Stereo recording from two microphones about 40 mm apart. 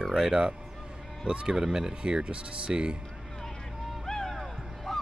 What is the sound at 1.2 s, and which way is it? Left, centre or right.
Speech, right.